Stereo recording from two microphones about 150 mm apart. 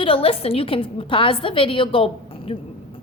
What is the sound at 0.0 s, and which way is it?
A woman's voice, 40° left (ahead or behind).